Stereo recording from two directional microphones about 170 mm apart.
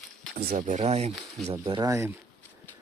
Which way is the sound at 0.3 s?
60° right (ahead or behind).